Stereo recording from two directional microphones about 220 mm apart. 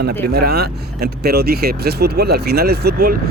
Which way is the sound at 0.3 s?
45° right (ahead or behind).